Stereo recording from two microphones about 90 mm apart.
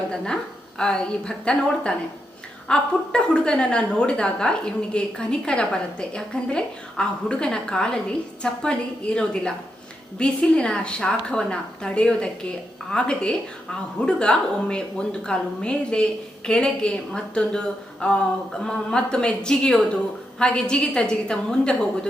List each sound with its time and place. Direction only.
0.8 s a woman's voice: 10° left (ahead or behind)